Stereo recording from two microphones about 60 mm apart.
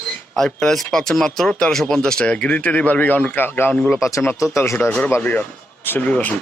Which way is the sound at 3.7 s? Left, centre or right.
Left.